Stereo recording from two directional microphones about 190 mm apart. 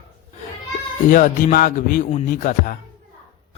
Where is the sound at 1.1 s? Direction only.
45° left (ahead or behind).